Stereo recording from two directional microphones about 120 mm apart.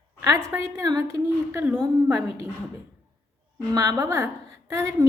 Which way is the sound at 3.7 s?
30° right (ahead or behind).